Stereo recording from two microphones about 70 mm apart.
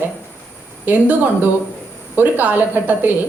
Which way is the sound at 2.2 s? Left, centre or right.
Right.